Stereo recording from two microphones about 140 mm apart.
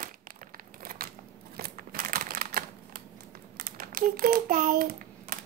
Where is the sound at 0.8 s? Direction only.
90° right.